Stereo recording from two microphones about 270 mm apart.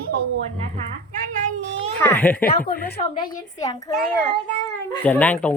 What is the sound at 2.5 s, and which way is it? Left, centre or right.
Speech, left.